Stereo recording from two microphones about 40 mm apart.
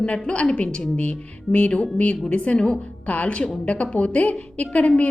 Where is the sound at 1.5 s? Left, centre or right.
Left.